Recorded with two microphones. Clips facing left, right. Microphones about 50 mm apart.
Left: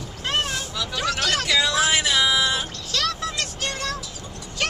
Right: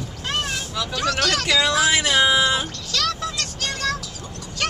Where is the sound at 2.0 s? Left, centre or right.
Right.